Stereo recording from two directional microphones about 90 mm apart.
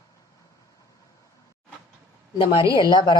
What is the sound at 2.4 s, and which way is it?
Speech, 65° left (ahead or behind).